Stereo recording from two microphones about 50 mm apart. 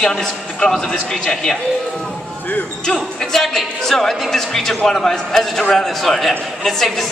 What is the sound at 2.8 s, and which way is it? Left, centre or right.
A man's voice, centre.